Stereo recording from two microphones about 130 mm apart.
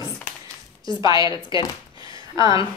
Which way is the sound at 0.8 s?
35° left (ahead or behind).